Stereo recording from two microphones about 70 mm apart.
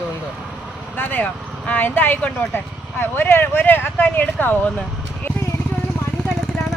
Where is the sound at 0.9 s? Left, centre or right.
Left.